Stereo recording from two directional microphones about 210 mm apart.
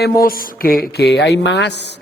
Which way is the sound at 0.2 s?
45° left (ahead or behind).